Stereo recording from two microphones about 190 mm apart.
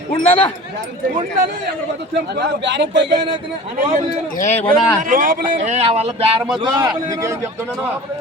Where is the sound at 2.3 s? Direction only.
60° right (ahead or behind).